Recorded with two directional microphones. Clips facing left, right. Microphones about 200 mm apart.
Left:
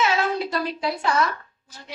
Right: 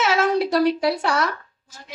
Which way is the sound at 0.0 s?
80° right.